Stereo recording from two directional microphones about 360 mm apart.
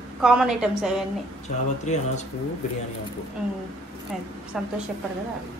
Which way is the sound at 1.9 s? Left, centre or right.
Centre.